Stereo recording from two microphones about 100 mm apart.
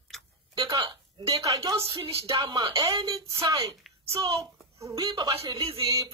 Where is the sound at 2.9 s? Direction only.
60° right (ahead or behind).